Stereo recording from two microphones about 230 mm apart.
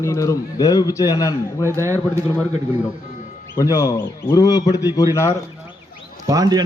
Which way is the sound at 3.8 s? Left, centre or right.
Centre.